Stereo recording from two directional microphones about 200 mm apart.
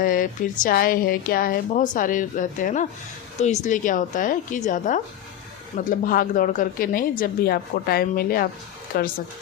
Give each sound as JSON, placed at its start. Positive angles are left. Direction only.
{"t": 0.0, "sound": "a woman's voice", "side_deg": 45}